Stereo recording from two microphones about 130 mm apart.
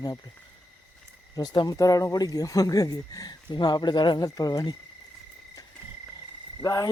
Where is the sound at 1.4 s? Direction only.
30° left (ahead or behind).